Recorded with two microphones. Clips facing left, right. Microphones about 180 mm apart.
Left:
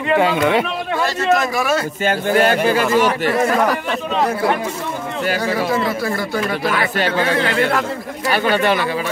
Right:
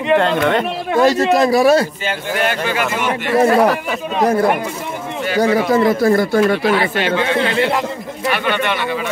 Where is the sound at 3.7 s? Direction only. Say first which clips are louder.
Right 1 dB; 5° right (ahead or behind).